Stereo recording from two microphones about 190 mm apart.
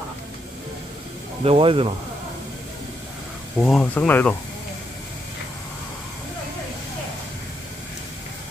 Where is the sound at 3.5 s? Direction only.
Centre (ahead or behind).